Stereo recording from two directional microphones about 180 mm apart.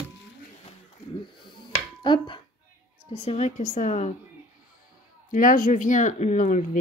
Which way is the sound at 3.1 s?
35° left (ahead or behind).